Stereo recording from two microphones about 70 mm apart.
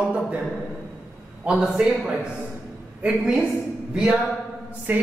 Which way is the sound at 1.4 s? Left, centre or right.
Centre.